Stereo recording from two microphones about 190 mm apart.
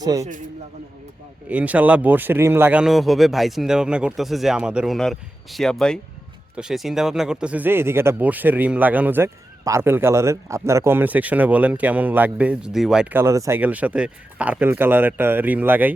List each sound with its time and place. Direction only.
0.0 s speech: 20° right (ahead or behind)
1.5 s speech: 10° right (ahead or behind)